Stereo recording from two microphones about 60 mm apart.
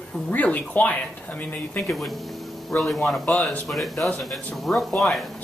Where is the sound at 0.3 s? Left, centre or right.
Left.